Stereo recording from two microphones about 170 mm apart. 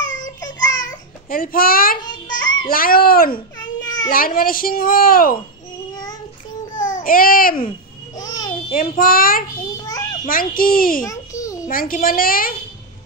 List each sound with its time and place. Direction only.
0.4 s a sound: 90° left
1.4 s a woman's voice: 55° left (ahead or behind)
2.0 s music: 25° left (ahead or behind)
2.6 s a woman's voice: 55° left (ahead or behind)
3.3 s baby cry: 25° left (ahead or behind)
4.1 s a woman's voice: 55° left (ahead or behind)
6.8 s a child's voice: 50° left (ahead or behind)
8.2 s babbling: 20° left (ahead or behind)
8.6 s a woman's voice: 55° left (ahead or behind)
9.8 s children playing: 20° left (ahead or behind)
10.5 s a woman's voice: 55° left (ahead or behind)
11.1 s a sound: 20° left (ahead or behind)
11.6 s a woman's voice: 55° left (ahead or behind)